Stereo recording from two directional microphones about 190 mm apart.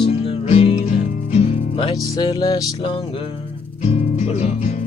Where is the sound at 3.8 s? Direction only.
35° left (ahead or behind).